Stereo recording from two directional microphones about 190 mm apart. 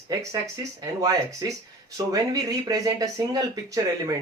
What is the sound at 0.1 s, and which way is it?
Speech, 20° right (ahead or behind).